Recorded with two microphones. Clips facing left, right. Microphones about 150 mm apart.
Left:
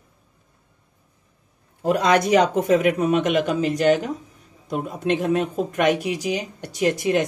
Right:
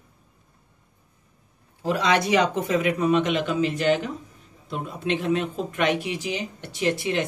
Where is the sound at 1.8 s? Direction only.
50° left (ahead or behind).